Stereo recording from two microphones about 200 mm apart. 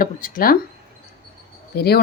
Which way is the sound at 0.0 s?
45° left (ahead or behind).